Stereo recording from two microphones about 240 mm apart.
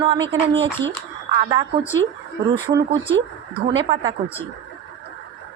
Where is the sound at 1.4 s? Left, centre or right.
Centre.